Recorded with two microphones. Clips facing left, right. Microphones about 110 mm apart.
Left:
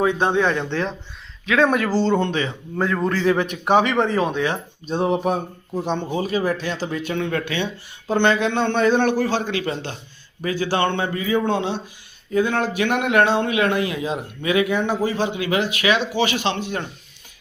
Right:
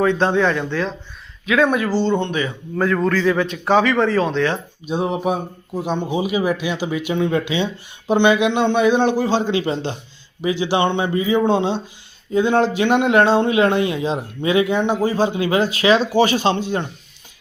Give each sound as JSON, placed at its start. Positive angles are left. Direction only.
{"t": 0.0, "sound": "speech", "side_deg": 15}
{"t": 1.5, "sound": "speech", "side_deg": 35}
{"t": 3.1, "sound": "speech", "side_deg": 25}
{"t": 4.9, "sound": "a man's voice", "side_deg": 0}